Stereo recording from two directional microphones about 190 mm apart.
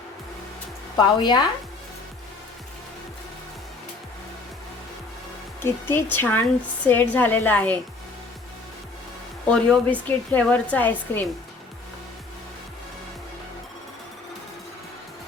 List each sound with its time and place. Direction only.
0.9 s speech: 20° left (ahead or behind)
5.6 s speech: 10° left (ahead or behind)
9.5 s speech: 5° left (ahead or behind)